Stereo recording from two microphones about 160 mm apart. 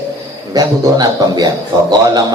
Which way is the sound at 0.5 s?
25° right (ahead or behind).